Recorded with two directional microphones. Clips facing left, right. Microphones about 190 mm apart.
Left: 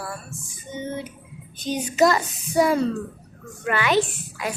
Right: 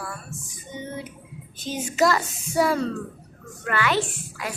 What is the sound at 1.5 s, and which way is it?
A woman's voice, 15° left (ahead or behind).